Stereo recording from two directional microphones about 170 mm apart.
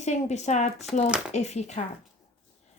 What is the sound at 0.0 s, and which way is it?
Speech, 40° left (ahead or behind).